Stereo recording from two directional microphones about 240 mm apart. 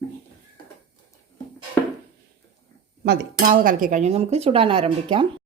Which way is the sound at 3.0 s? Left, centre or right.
Right.